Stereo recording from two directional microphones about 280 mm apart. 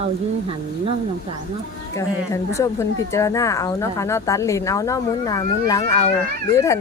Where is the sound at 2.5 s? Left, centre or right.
Centre.